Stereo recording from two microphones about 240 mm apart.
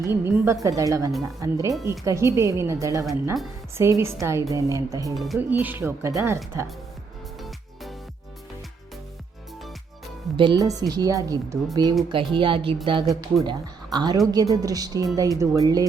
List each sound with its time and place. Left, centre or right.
0.0 s a woman's voice: centre
5.1 s a woman's voice: centre
10.3 s a woman's voice: centre